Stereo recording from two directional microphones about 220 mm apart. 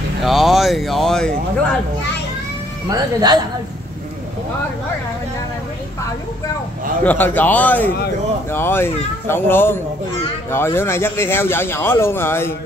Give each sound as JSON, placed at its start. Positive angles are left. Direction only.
{"t": 0.2, "sound": "speech", "side_deg": 0}
{"t": 2.9, "sound": "speech", "side_deg": -20}
{"t": 7.1, "sound": "speech", "side_deg": 10}